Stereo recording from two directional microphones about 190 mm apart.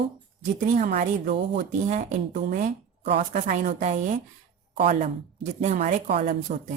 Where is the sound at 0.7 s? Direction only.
45° right (ahead or behind).